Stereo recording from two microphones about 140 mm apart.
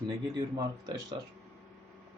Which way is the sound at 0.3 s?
25° right (ahead or behind).